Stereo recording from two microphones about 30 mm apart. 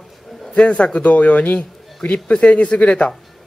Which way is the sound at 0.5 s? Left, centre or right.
Left.